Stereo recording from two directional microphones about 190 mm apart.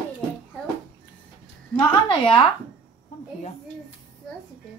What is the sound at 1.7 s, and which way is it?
Speech, 25° left (ahead or behind).